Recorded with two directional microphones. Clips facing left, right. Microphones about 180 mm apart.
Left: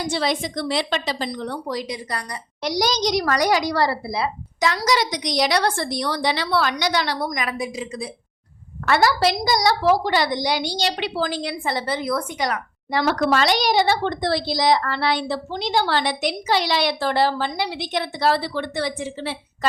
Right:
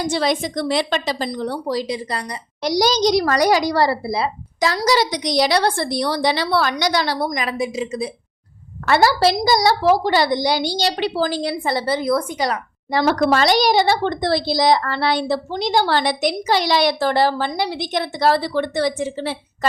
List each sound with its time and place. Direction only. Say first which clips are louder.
0.0 s a woman's voice: right 3 dB; 45° right (ahead or behind)